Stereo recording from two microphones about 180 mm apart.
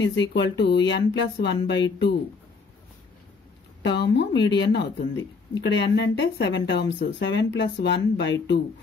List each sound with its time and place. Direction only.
0.0 s speech: 90° left
3.8 s speech: 75° left (ahead or behind)